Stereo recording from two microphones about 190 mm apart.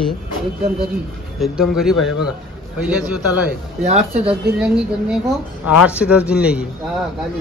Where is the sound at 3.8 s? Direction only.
35° right (ahead or behind).